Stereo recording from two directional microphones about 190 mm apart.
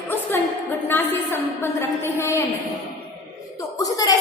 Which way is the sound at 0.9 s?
10° left (ahead or behind).